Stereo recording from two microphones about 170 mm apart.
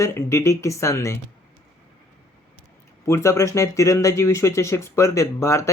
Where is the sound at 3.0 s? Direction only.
15° left (ahead or behind).